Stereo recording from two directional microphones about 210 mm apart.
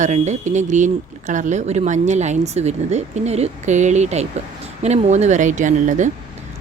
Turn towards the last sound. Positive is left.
turn(degrees=-35)  # may be behind; listen again after turning